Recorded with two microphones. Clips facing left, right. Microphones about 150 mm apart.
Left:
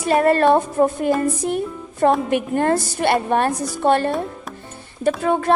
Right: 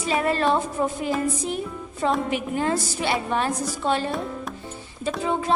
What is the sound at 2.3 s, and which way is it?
A woman's voice, 55° left (ahead or behind).